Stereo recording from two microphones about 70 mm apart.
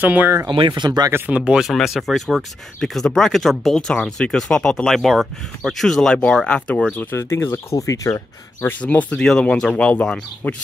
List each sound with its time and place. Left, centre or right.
0.0 s speech: right
0.7 s speech: right
1.3 s speech: centre
1.7 s speech: centre
4.8 s speech: centre
7.0 s speech: left
7.7 s speech: left
8.5 s speech: left
8.8 s speech: centre